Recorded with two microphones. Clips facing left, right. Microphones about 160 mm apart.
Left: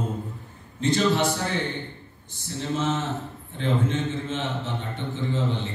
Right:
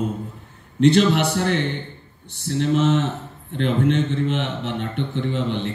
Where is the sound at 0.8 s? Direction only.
70° right (ahead or behind).